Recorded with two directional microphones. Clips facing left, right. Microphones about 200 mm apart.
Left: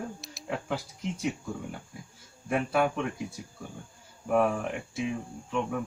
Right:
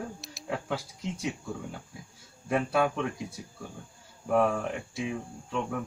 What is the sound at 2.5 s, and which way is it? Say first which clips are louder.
Speech: even; 5° left (ahead or behind).